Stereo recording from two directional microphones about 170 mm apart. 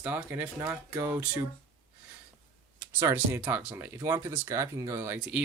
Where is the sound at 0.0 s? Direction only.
10° right (ahead or behind).